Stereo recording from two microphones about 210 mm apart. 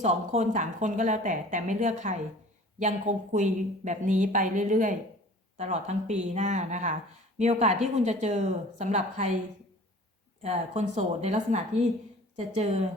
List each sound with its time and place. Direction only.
0.0 s speech: 35° right (ahead or behind)
10.4 s speech: 30° right (ahead or behind)